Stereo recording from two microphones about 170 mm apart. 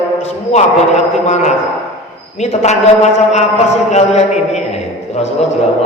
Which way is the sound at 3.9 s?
40° left (ahead or behind).